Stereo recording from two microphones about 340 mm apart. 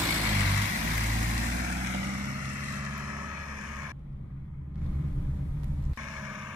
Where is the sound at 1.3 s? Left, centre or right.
Right.